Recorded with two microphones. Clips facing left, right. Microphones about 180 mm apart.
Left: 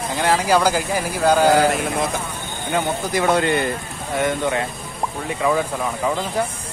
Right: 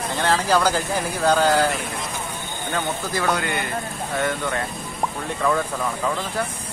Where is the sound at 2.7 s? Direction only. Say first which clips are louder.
Left 5 dB; 20° left (ahead or behind).